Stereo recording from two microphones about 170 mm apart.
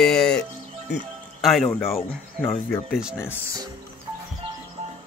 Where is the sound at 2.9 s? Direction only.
5° right (ahead or behind).